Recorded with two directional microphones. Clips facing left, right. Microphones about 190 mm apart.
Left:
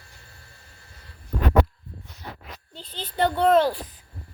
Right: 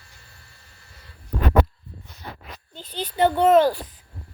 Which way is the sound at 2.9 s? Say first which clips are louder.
Right 4 dB; 10° right (ahead or behind).